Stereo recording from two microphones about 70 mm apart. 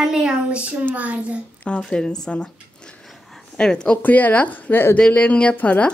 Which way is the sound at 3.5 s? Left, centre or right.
Centre.